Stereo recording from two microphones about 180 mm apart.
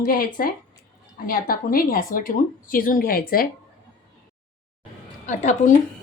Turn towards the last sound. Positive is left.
turn(degrees=40)  # may be behind; listen again after turning